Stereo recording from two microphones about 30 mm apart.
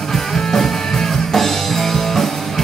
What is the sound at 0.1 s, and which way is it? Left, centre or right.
Music, centre.